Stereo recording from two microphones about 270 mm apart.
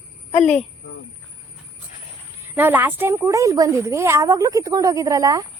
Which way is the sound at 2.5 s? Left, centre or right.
Centre.